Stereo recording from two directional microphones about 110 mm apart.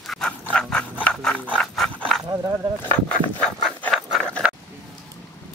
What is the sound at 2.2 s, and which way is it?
Speech, 30° right (ahead or behind).